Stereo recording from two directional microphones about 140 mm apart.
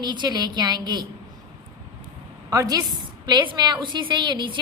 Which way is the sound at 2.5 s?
25° right (ahead or behind).